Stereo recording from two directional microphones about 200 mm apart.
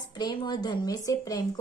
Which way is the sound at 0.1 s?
20° left (ahead or behind).